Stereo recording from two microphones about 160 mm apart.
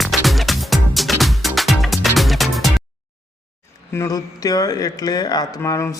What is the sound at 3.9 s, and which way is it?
Speech, 20° left (ahead or behind).